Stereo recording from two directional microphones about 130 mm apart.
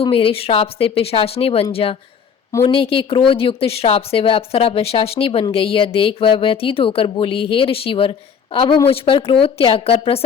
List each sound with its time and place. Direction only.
0.0 s a woman's voice: 45° left (ahead or behind)